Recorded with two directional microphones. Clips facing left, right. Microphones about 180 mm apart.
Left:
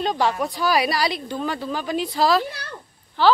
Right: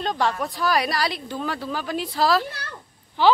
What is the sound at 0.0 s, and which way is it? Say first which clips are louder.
A woman's voice: left 2 dB; 5° left (ahead or behind).